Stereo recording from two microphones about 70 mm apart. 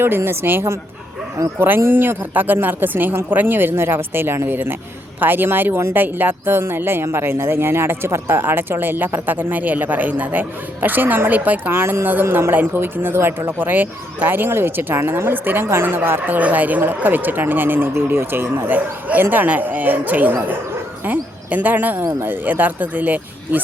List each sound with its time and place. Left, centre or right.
0.2 s speech: right
11.7 s speech: right